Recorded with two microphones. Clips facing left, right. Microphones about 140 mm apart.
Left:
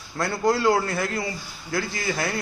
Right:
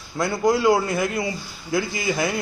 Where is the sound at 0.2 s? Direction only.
15° right (ahead or behind).